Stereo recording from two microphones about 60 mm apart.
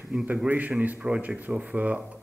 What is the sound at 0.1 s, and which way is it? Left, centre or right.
Speech, centre.